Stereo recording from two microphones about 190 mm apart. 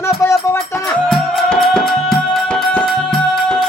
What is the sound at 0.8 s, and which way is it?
Music, centre (ahead or behind).